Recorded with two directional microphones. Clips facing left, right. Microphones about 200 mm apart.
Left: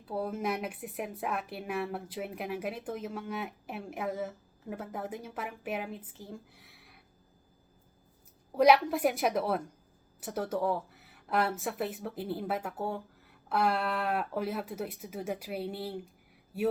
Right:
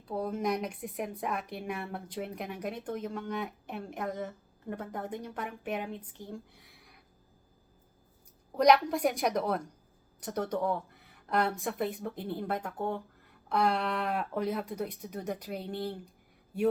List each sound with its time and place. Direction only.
0.0 s speech: 5° left (ahead or behind)
8.5 s speech: 5° left (ahead or behind)